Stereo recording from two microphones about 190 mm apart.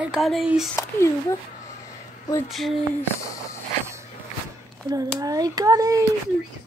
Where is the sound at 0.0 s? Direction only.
Centre (ahead or behind).